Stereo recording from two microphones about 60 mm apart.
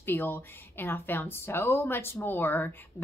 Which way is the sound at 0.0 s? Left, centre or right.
Left.